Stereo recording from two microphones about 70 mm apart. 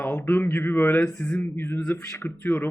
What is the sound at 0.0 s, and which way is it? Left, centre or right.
A man's voice, left.